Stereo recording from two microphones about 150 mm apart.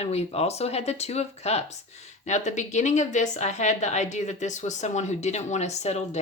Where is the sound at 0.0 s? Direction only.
45° left (ahead or behind).